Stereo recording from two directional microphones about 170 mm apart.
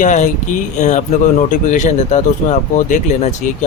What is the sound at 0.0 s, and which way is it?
Speech, 45° left (ahead or behind).